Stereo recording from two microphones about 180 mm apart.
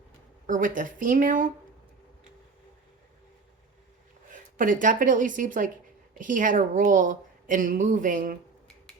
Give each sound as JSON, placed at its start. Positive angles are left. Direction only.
{"t": 0.4, "sound": "a woman's voice", "side_deg": -50}
{"t": 4.3, "sound": "a woman's voice", "side_deg": -50}